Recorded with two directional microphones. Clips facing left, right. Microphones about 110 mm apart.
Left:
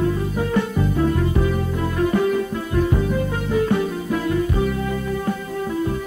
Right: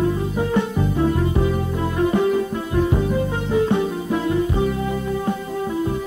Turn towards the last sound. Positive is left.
turn(degrees=-20)  # may be behind; listen again after turning